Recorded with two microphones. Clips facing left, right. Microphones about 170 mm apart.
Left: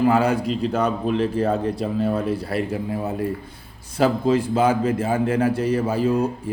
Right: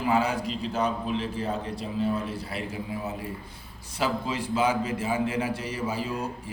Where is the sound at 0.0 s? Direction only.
60° left (ahead or behind).